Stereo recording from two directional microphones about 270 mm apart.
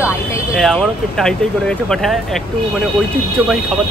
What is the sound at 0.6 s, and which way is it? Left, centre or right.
Speech, centre.